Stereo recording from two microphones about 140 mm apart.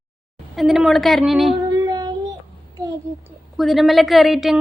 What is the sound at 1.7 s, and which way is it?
Child singing, 25° right (ahead or behind).